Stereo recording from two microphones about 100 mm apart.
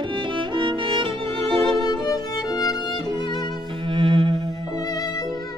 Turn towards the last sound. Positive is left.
turn(degrees=40)  # may be behind; listen again after turning